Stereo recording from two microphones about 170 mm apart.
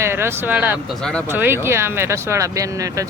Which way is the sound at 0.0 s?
15° right (ahead or behind).